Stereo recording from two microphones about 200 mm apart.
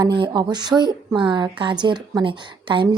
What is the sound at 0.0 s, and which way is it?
Speech, 20° right (ahead or behind).